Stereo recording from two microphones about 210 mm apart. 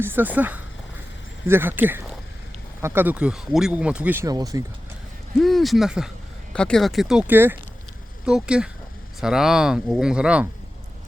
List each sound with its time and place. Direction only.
0.0 s speech: 10° right (ahead or behind)
5.4 s speech: centre (ahead or behind)